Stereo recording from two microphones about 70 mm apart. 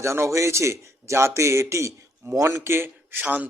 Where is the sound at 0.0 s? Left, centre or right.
Right.